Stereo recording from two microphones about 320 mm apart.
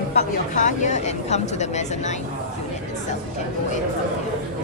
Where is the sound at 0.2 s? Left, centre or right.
Left.